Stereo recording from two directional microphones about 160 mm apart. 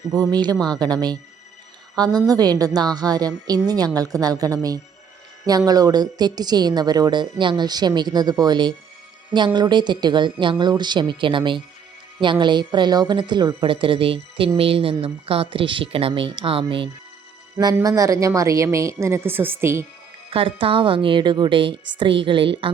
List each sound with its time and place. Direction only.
0.1 s a woman's voice: 25° right (ahead or behind)
17.7 s a woman's voice: 20° right (ahead or behind)
20.3 s a woman's voice: 35° right (ahead or behind)